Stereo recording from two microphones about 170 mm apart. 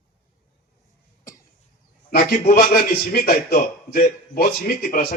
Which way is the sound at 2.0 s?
55° left (ahead or behind).